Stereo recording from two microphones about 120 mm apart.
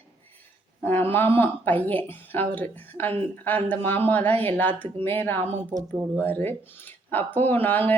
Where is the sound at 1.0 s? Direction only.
15° left (ahead or behind).